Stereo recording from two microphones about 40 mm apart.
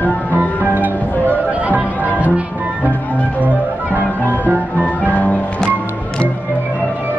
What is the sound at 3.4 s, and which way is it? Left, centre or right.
Music, right.